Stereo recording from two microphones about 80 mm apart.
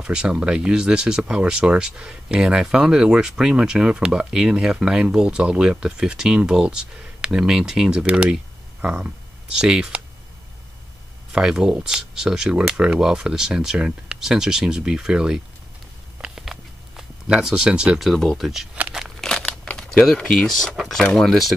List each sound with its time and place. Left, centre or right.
0.0 s speech: centre
9.6 s speech: centre
11.3 s speech: centre
16.2 s a sound: centre
18.0 s speech: centre
18.8 s a sound: centre
19.0 s crumpling: centre
20.1 s speech: centre